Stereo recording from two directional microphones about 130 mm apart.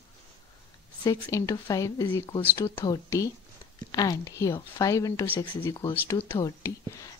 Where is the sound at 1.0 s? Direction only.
25° left (ahead or behind).